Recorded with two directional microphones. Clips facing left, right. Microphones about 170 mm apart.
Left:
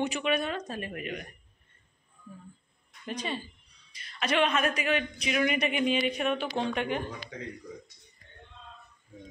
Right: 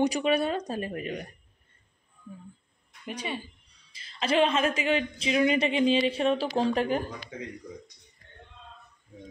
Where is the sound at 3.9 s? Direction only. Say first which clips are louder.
Right 3 dB; 25° right (ahead or behind).